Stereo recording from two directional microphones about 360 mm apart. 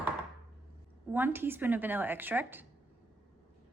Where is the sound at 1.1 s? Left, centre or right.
Centre.